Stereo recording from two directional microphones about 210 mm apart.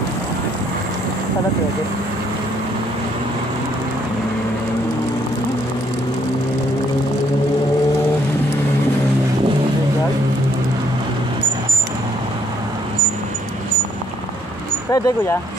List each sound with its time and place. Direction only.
14.9 s speech: 15° left (ahead or behind)